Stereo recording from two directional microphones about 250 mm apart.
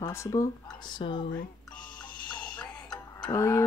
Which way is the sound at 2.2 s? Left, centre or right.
Centre.